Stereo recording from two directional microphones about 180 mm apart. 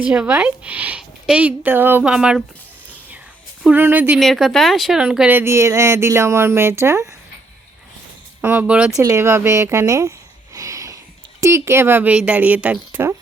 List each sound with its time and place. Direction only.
0.0 s speech: 5° right (ahead or behind)
3.6 s speech: 10° right (ahead or behind)
8.4 s speech: 10° right (ahead or behind)
9.0 s speech: 15° right (ahead or behind)